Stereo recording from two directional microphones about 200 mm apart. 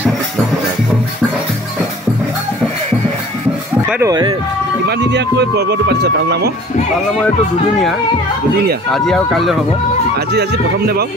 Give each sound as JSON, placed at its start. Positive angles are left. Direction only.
{"t": 3.9, "sound": "speech", "side_deg": -15}
{"t": 4.8, "sound": "speech", "side_deg": -55}
{"t": 8.9, "sound": "speech", "side_deg": 0}
{"t": 10.1, "sound": "speech", "side_deg": -55}